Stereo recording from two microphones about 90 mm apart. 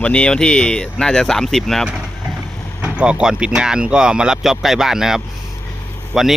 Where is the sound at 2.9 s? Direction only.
10° right (ahead or behind).